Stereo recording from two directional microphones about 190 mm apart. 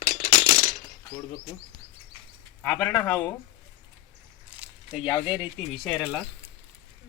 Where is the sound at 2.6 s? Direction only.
15° left (ahead or behind).